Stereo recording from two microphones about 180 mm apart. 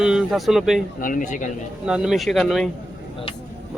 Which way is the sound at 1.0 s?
45° left (ahead or behind).